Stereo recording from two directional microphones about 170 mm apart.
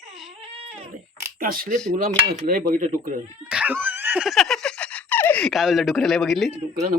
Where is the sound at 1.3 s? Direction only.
60° right (ahead or behind).